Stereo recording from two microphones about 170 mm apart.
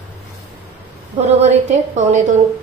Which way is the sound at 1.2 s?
40° right (ahead or behind).